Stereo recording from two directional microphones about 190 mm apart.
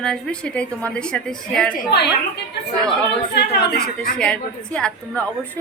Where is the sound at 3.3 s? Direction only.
60° left (ahead or behind).